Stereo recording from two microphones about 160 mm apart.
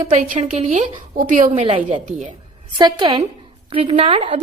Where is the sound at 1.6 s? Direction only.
35° right (ahead or behind).